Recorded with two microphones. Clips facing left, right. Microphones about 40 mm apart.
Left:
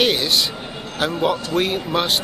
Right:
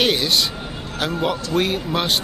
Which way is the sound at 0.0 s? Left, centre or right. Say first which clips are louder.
Even; centre.